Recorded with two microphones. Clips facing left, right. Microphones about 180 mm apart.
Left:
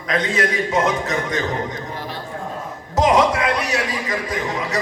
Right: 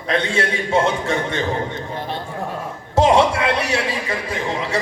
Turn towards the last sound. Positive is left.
turn(degrees=-30)  # may be behind; listen again after turning